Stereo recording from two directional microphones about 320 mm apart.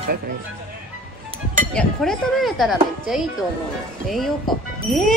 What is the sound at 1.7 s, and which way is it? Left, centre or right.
Speech, centre.